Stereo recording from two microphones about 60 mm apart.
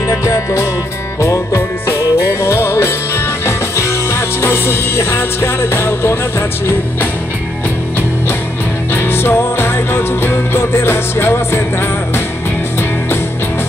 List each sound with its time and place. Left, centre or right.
0.1 s music: left
8.9 s music: left